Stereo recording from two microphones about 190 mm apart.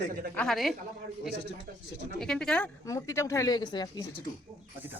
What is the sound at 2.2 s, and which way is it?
Speech, 5° left (ahead or behind).